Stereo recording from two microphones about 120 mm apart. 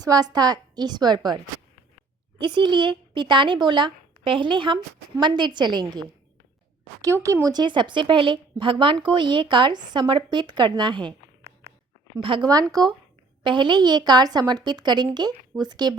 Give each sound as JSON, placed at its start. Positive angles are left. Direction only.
{"t": 0.0, "sound": "a woman's voice", "side_deg": -30}
{"t": 2.4, "sound": "a woman's voice", "side_deg": -40}
{"t": 7.0, "sound": "a woman's voice", "side_deg": -25}
{"t": 12.2, "sound": "a woman's voice", "side_deg": -45}